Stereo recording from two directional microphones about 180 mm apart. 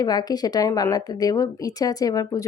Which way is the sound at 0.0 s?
20° left (ahead or behind).